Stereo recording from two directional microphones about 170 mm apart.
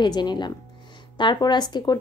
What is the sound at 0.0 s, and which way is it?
A woman's voice, 25° left (ahead or behind).